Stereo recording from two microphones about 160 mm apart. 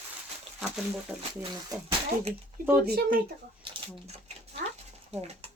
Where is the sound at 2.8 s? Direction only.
75° right (ahead or behind).